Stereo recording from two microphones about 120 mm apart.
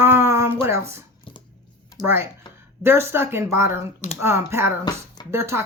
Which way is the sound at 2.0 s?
20° right (ahead or behind).